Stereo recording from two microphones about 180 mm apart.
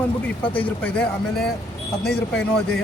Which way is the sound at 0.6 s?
10° left (ahead or behind).